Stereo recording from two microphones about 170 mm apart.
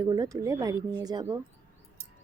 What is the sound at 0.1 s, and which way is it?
Speech, 20° right (ahead or behind).